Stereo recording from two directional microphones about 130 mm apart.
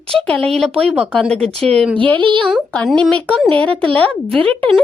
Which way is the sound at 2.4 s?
Centre (ahead or behind).